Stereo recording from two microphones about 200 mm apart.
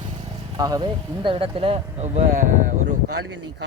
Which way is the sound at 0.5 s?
20° right (ahead or behind).